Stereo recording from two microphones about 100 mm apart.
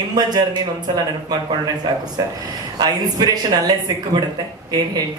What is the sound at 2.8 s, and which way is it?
Speech, 40° right (ahead or behind).